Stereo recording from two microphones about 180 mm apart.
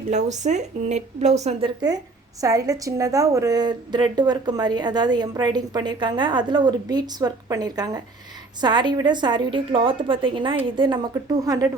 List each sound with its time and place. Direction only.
0.1 s speech: 40° right (ahead or behind)
2.4 s a woman's voice: 20° right (ahead or behind)